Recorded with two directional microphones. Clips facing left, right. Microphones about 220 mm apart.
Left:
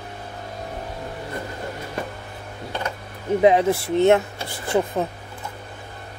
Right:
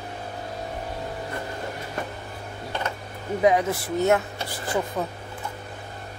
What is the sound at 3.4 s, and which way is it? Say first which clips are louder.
Speech: left 4 dB; 25° left (ahead or behind).